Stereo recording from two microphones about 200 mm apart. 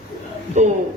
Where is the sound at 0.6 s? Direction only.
35° right (ahead or behind).